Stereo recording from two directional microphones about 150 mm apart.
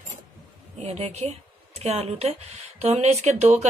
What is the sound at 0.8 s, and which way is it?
Speech, 45° right (ahead or behind).